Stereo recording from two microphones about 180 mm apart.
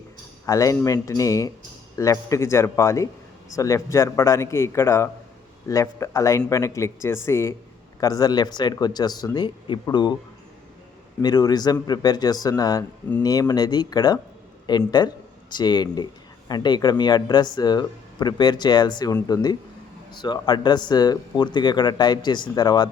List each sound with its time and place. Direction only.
0.4 s a man's voice: 20° left (ahead or behind)
11.2 s speech: 20° left (ahead or behind)